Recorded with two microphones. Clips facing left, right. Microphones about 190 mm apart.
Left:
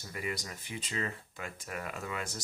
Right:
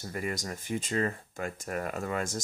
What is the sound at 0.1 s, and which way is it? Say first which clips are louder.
Speech: right 4 dB; 45° right (ahead or behind).